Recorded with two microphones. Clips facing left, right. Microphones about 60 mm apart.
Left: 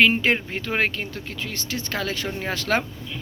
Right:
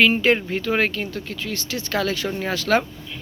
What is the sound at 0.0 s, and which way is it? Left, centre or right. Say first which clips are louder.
Speech: right 2 dB; left.